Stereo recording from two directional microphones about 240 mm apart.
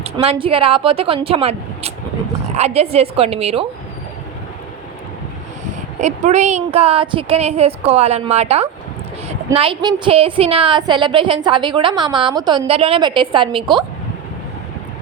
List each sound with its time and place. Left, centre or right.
0.0 s a woman's voice: right
6.0 s a woman's voice: right